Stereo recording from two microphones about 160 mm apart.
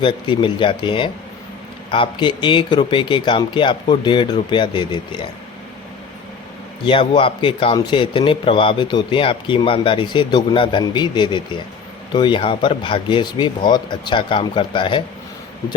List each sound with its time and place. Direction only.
0.0 s a man's voice: 30° left (ahead or behind)
6.8 s a man's voice: 30° left (ahead or behind)